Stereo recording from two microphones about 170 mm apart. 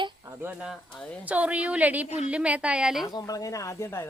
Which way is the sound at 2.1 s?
40° left (ahead or behind).